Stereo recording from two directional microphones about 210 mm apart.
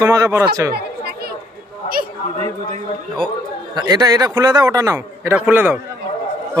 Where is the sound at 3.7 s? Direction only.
20° right (ahead or behind).